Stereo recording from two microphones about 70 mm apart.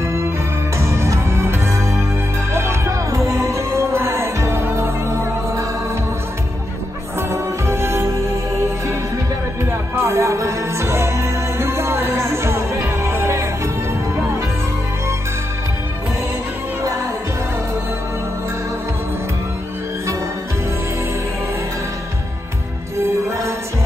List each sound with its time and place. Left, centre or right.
0.0 s music: right
7.2 s music: right
9.7 s music: right